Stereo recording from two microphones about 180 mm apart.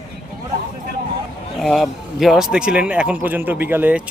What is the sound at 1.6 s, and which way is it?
Speech, centre (ahead or behind).